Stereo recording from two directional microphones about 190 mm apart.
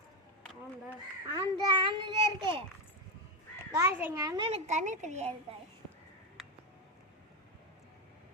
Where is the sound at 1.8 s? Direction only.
25° right (ahead or behind).